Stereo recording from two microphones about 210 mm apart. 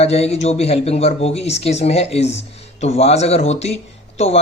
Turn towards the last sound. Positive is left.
turn(degrees=30)  # may be behind; listen again after turning